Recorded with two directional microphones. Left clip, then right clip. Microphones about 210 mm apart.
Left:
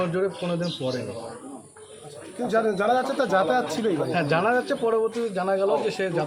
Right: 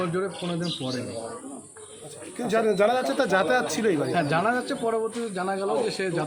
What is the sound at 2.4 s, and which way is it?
Speech, 25° right (ahead or behind).